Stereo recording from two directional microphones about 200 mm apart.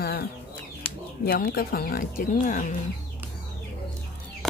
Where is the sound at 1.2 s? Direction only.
50° left (ahead or behind).